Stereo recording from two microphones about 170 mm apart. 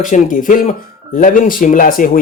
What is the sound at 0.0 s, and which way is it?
Speech, 50° left (ahead or behind).